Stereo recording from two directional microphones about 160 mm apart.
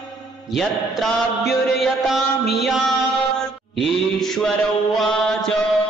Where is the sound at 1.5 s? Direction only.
Centre (ahead or behind).